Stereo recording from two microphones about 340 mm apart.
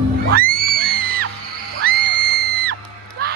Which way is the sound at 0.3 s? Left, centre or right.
Right.